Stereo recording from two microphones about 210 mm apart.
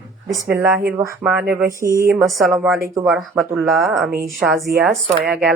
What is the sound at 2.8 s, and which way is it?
Speech, 15° right (ahead or behind).